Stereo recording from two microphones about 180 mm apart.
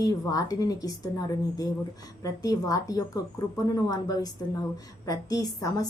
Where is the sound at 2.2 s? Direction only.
20° left (ahead or behind).